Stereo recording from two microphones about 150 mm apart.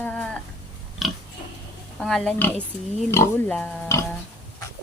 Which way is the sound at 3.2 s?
20° left (ahead or behind).